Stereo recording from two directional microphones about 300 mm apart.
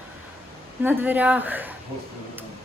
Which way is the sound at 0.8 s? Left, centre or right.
Centre.